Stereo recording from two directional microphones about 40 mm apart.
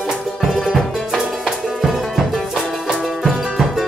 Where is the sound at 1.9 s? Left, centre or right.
Centre.